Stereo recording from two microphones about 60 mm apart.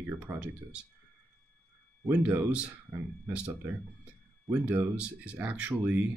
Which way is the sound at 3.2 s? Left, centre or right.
Right.